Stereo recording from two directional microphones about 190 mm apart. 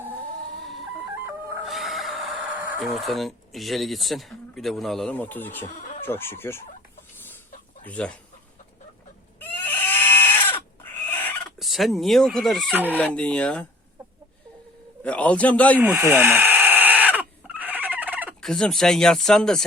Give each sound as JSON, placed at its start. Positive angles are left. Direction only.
{"t": 0.6, "sound": "a sound", "side_deg": 0}
{"t": 2.8, "sound": "speech", "side_deg": 0}
{"t": 5.6, "sound": "speech", "side_deg": 45}
{"t": 6.1, "sound": "a man's voice", "side_deg": 10}
{"t": 7.9, "sound": "a man's voice", "side_deg": 5}
{"t": 9.4, "sound": "livestock", "side_deg": 10}
{"t": 11.6, "sound": "speech", "side_deg": 0}
{"t": 13.0, "sound": "speech", "side_deg": 5}
{"t": 15.0, "sound": "a man's voice", "side_deg": 5}
{"t": 15.8, "sound": "a sound", "side_deg": -10}
{"t": 18.3, "sound": "speech", "side_deg": 5}